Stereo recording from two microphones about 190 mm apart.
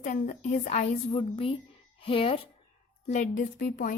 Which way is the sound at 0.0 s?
40° left (ahead or behind).